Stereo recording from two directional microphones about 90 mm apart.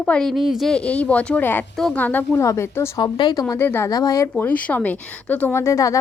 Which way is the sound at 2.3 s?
35° left (ahead or behind).